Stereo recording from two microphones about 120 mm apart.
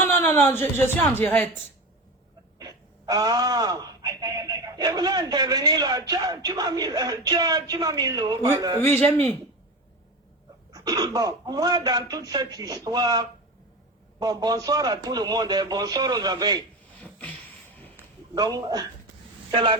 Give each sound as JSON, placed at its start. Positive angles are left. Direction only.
{"t": 0.0, "sound": "a man's voice", "side_deg": 15}
{"t": 2.6, "sound": "a sound", "side_deg": -30}
{"t": 4.2, "sound": "a man's voice", "side_deg": -30}
{"t": 9.0, "sound": "a man's voice", "side_deg": 15}
{"t": 10.7, "sound": "a man's voice", "side_deg": -30}
{"t": 17.0, "sound": "a sound", "side_deg": 10}
{"t": 18.3, "sound": "a man's voice", "side_deg": -30}